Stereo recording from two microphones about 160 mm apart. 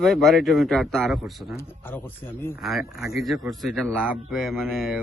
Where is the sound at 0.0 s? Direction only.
Centre (ahead or behind).